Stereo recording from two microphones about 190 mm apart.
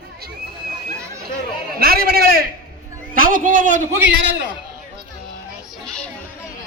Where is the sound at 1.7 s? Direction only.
55° right (ahead or behind).